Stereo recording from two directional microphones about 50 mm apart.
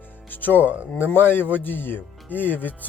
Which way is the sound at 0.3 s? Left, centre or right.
Left.